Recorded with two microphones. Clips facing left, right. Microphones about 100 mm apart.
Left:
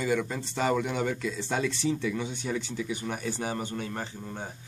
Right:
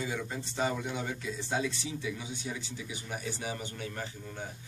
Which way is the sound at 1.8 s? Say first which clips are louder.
Left 8 dB; 55° left (ahead or behind).